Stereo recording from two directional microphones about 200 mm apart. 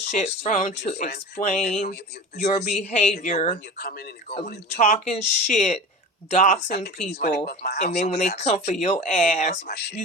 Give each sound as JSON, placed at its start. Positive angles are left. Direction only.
{"t": 0.1, "sound": "speech", "side_deg": 35}
{"t": 3.5, "sound": "speech", "side_deg": 50}
{"t": 4.4, "sound": "speech", "side_deg": 40}
{"t": 8.0, "sound": "speech", "side_deg": 35}
{"t": 9.7, "sound": "speech", "side_deg": 55}